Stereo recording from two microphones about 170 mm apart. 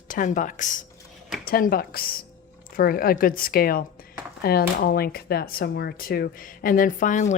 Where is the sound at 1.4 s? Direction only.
60° left (ahead or behind).